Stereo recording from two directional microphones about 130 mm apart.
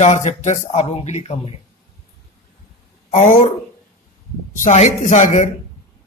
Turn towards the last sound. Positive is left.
turn(degrees=75)  # may be behind; listen again after turning